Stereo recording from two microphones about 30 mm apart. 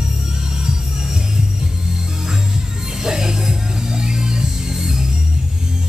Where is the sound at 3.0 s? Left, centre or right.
Right.